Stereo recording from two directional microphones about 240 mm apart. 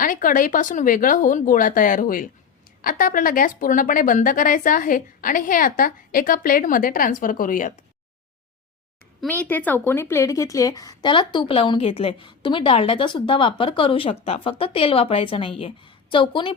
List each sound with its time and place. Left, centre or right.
0.0 s a woman's voice: left
9.2 s a woman's voice: centre